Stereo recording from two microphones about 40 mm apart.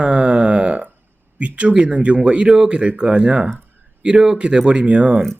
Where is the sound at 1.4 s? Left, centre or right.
Right.